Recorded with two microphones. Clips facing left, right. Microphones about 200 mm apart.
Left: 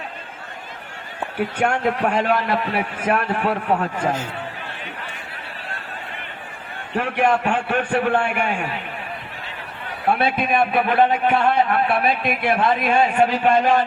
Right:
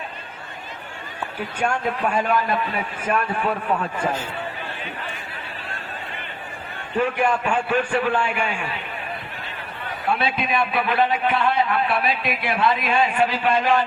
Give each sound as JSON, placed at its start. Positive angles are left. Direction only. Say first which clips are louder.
{"t": 1.4, "sound": "a man's voice", "louder": "left 4 dB", "side_deg": 65}
{"t": 6.9, "sound": "a man's voice", "louder": "left 1 dB", "side_deg": 70}
{"t": 10.1, "sound": "a man's voice", "louder": "left 4 dB", "side_deg": 55}